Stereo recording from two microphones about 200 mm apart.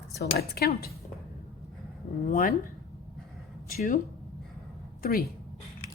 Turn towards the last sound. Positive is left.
turn(degrees=50)  # may be behind; listen again after turning